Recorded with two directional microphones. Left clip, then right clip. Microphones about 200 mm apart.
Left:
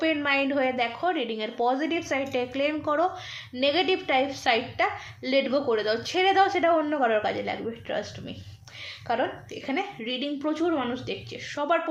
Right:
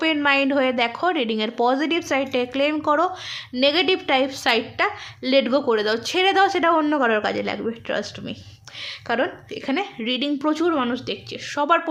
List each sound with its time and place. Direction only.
0.0 s a woman's voice: 40° right (ahead or behind)